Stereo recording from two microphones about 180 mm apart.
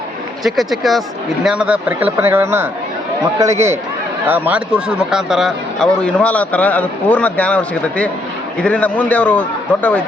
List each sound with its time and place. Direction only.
0.4 s a man's voice: centre (ahead or behind)